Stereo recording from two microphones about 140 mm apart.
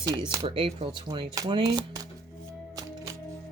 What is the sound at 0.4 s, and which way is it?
Speech, 40° right (ahead or behind).